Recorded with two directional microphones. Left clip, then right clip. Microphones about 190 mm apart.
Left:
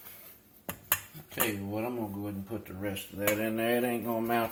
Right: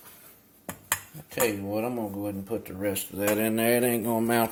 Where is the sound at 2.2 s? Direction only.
45° right (ahead or behind).